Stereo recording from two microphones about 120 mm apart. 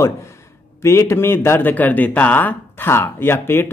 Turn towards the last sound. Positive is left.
turn(degrees=20)  # may be behind; listen again after turning